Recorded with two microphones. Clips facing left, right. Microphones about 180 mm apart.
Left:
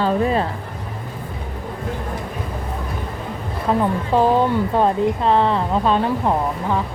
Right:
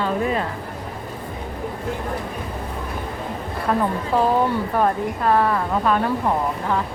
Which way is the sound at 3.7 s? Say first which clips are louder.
Left 2 dB; 20° left (ahead or behind).